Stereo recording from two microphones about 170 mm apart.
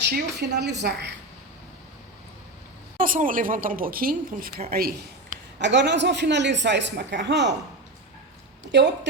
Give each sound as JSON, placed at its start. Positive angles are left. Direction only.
{"t": 0.3, "sound": "a woman's voice", "side_deg": -80}
{"t": 3.0, "sound": "a woman's voice", "side_deg": -55}
{"t": 8.7, "sound": "a man's voice", "side_deg": -90}